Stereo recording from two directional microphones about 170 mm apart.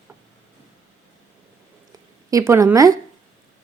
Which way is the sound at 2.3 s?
15° right (ahead or behind).